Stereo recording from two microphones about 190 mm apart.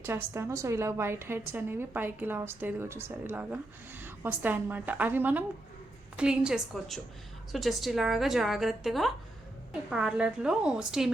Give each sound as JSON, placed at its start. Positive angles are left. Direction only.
{"t": 0.0, "sound": "a woman's voice", "side_deg": -10}